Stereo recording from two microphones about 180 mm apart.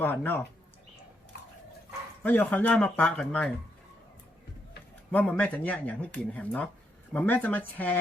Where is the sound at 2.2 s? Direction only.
10° left (ahead or behind).